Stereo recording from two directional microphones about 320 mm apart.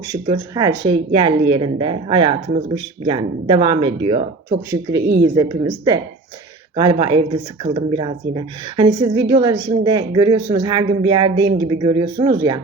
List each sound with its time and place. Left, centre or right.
0.1 s speech: centre